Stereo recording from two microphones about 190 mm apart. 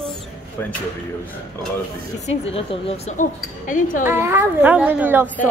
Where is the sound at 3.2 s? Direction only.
45° left (ahead or behind).